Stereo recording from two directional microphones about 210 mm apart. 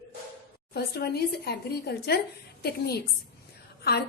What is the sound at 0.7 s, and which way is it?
A woman's voice, 50° left (ahead or behind).